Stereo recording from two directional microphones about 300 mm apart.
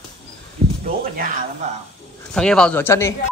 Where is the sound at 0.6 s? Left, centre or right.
Right.